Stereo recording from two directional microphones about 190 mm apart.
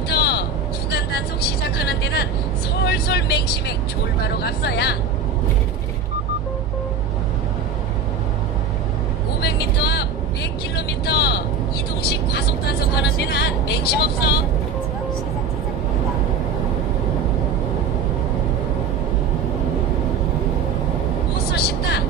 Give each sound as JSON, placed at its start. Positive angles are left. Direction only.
{"t": 0.1, "sound": "vehicle", "side_deg": 60}
{"t": 2.8, "sound": "speech", "side_deg": 60}
{"t": 9.4, "sound": "vehicle", "side_deg": 60}
{"t": 21.5, "sound": "vehicle", "side_deg": 60}